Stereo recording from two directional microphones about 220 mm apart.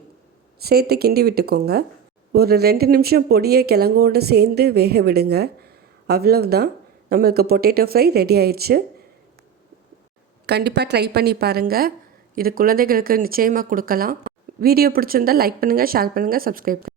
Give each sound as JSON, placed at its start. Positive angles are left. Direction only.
{"t": 0.6, "sound": "speech", "side_deg": -45}
{"t": 10.4, "sound": "speech", "side_deg": -50}